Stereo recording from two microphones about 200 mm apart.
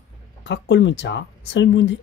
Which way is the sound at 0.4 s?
60° left (ahead or behind).